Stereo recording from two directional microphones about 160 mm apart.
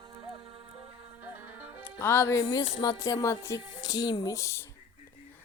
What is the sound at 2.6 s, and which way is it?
Speech, 25° left (ahead or behind).